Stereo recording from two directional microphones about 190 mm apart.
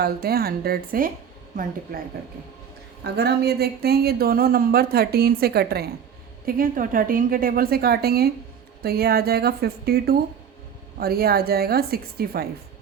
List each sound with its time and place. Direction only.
0.0 s a woman's voice: 55° right (ahead or behind)
3.0 s a woman's voice: 60° right (ahead or behind)